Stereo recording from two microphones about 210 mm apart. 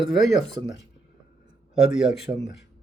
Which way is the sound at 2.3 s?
30° right (ahead or behind).